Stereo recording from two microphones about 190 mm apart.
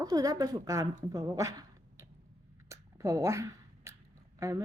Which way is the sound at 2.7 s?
15° right (ahead or behind).